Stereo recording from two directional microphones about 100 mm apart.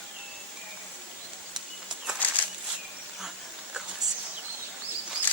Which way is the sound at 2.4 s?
15° left (ahead or behind).